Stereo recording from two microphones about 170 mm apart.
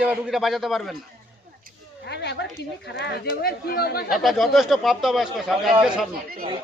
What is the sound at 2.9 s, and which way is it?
Speech, 80° left.